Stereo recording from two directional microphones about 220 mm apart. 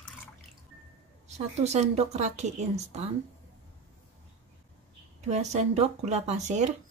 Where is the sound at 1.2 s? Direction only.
30° right (ahead or behind).